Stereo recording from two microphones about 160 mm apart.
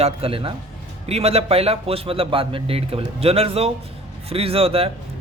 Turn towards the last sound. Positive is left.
turn(degrees=-35)  # may be behind; listen again after turning